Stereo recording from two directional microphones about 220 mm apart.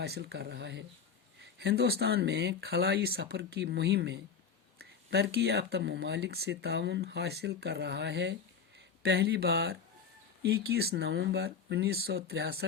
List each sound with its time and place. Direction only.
0.0 s speech: 45° right (ahead or behind)